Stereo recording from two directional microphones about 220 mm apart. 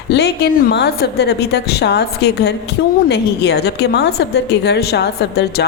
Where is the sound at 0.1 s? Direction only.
50° left (ahead or behind).